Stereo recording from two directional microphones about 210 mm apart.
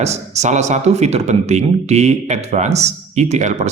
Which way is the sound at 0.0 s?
30° right (ahead or behind).